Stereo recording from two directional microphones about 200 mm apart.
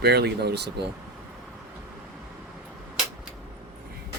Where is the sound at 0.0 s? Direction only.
55° right (ahead or behind).